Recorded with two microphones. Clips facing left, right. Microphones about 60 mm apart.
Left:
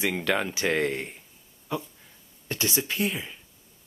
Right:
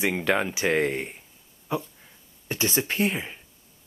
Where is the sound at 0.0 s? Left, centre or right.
Centre.